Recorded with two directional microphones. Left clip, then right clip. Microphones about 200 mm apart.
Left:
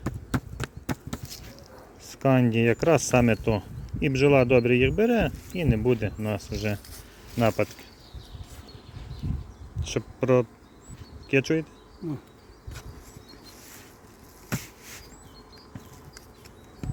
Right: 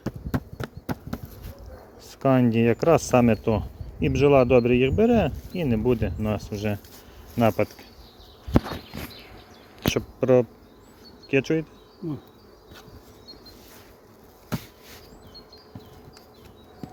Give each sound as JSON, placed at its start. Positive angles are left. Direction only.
{"t": 0.5, "sound": "a sound", "side_deg": 0}
{"t": 2.0, "sound": "speech", "side_deg": 5}
{"t": 9.8, "sound": "insect", "side_deg": 5}
{"t": 11.3, "sound": "speech", "side_deg": 5}